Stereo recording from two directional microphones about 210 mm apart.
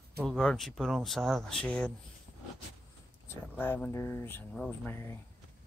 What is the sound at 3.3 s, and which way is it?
Speech, 10° left (ahead or behind).